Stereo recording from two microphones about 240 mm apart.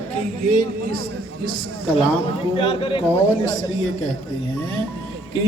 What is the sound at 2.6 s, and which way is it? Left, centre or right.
A man's voice, left.